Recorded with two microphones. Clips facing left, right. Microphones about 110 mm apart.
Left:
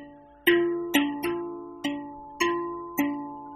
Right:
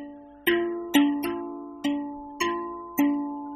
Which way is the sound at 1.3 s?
35° right (ahead or behind).